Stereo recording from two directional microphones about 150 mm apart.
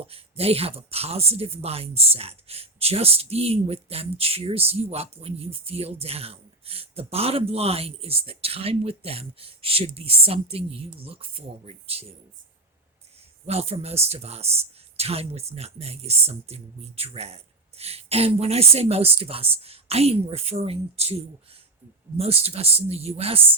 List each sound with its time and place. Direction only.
0.1 s speech: 40° right (ahead or behind)
13.4 s speech: 45° right (ahead or behind)
22.2 s speech: 40° right (ahead or behind)